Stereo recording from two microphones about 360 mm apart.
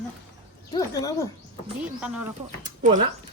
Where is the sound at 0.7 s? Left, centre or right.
Centre.